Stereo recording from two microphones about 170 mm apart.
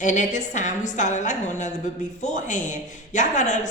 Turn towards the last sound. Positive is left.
turn(degrees=45)  # may be behind; listen again after turning